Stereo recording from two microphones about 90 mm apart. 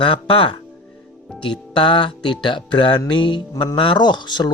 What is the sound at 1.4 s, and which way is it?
Music, 65° left (ahead or behind).